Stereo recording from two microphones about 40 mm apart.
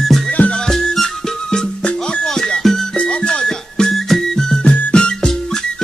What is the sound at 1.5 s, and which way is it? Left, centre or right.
Music, left.